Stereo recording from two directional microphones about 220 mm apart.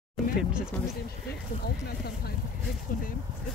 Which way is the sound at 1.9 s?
45° left (ahead or behind).